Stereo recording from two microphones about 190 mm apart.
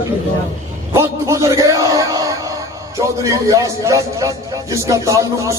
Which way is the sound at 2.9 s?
15° right (ahead or behind).